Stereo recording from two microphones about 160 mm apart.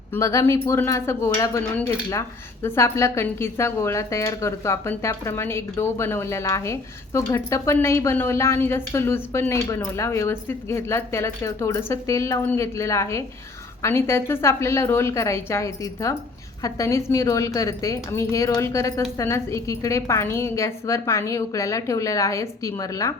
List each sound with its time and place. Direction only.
0.1 s a woman's voice: 20° left (ahead or behind)